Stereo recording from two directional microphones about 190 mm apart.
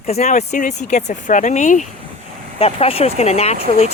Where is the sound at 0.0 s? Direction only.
35° left (ahead or behind).